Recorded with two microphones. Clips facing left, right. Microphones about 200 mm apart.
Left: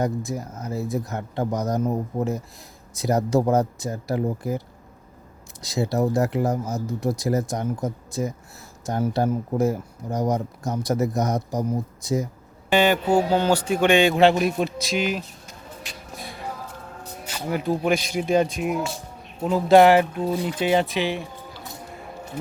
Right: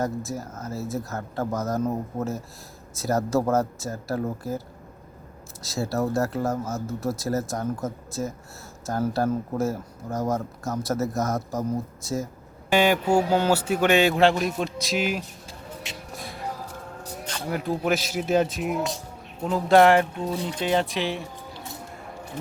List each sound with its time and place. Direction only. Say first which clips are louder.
0.0 s speech: left 3 dB; 15° left (ahead or behind)
5.6 s speech: left 3 dB; 15° left (ahead or behind)
12.7 s a man's voice: left 1 dB; 10° right (ahead or behind)
14.3 s a man's voice: left 4 dB; 10° left (ahead or behind); by 15.2 s 5° right (ahead or behind)
15.4 s music: right 2 dB; 25° right (ahead or behind)
16.1 s music: left 1 dB; centre (ahead or behind)
17.2 s a man's voice: left 3 dB; 5° left (ahead or behind)